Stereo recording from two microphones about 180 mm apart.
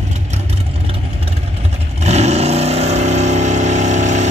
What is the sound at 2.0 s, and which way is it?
Vehicle, 35° right (ahead or behind).